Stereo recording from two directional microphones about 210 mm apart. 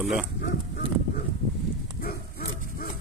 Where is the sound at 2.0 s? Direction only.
45° left (ahead or behind).